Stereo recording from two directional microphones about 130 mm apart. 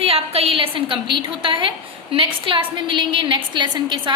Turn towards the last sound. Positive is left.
turn(degrees=-35)  # may be behind; listen again after turning